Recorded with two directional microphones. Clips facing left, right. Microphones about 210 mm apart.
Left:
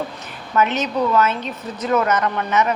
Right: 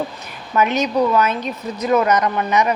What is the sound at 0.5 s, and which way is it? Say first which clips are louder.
Speech: right 2 dB; 10° right (ahead or behind).